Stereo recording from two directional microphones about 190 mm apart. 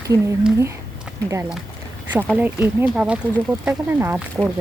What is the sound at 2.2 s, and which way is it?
Speech, 10° right (ahead or behind).